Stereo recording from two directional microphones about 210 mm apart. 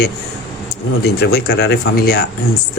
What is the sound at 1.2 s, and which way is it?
Speech, 50° left (ahead or behind).